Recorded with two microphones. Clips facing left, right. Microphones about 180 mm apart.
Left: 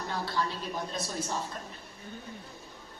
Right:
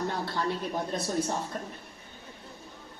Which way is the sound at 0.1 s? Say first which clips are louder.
Right 2 dB; 55° right (ahead or behind).